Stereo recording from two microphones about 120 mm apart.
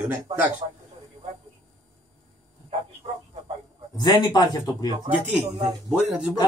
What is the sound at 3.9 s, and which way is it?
Speech, 35° left (ahead or behind).